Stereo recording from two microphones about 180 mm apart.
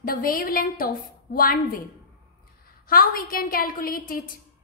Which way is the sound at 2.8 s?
55° left (ahead or behind).